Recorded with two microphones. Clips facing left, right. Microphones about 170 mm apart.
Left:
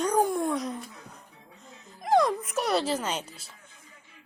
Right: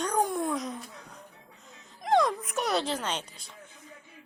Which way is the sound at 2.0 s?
Centre (ahead or behind).